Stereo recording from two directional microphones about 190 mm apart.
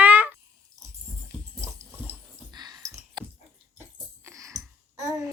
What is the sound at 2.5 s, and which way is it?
Sigh, 20° right (ahead or behind).